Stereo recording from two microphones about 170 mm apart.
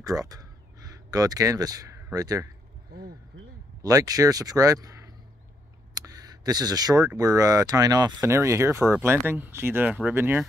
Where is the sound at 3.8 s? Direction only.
20° right (ahead or behind).